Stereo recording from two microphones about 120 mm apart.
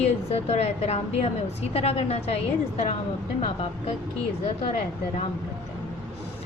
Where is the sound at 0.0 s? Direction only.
60° left (ahead or behind).